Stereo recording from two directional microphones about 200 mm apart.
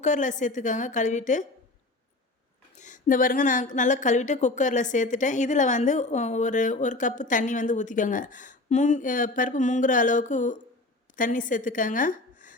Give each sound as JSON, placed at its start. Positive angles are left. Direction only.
{"t": 0.0, "sound": "speech", "side_deg": 40}
{"t": 2.7, "sound": "a woman's voice", "side_deg": 40}